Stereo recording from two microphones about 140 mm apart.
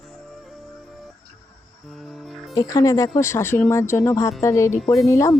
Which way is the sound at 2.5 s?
25° left (ahead or behind).